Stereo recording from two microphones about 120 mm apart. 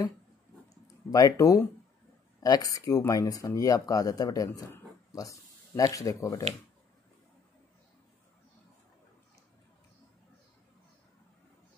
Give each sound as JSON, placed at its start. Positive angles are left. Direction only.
{"t": 1.1, "sound": "speech", "side_deg": 30}